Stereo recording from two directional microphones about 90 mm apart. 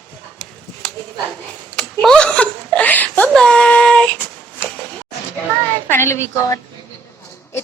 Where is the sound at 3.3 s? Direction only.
10° left (ahead or behind).